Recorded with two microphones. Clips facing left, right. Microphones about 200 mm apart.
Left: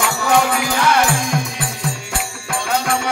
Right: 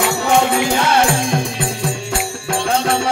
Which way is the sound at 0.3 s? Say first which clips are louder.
Right 1 dB; 25° right (ahead or behind).